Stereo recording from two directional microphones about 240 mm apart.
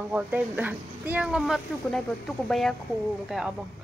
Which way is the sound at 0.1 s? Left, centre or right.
Centre.